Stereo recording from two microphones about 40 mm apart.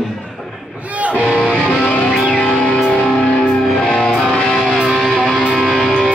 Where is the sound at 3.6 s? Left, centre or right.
Centre.